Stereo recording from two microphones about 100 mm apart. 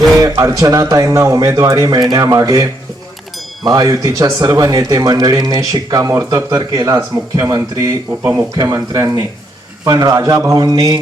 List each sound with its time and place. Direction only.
0.2 s speech: 35° right (ahead or behind)
3.7 s speech: 40° right (ahead or behind)